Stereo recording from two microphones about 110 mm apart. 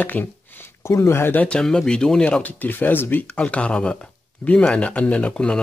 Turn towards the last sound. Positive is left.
turn(degrees=10)  # may be behind; listen again after turning